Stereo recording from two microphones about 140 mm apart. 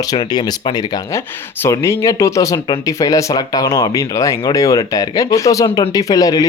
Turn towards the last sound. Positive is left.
turn(degrees=25)  # may be behind; listen again after turning